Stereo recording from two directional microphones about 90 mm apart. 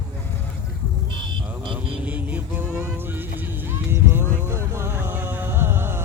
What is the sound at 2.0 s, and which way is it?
Music, 15° right (ahead or behind).